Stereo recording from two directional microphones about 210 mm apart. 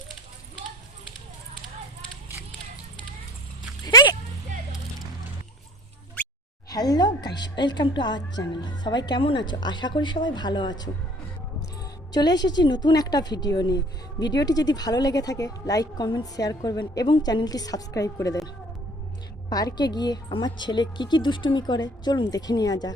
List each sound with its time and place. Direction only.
3.8 s a sound: 20° left (ahead or behind)
6.7 s a woman's voice: 20° left (ahead or behind)
12.1 s a woman's voice: 20° left (ahead or behind)
19.5 s a woman's voice: 20° left (ahead or behind)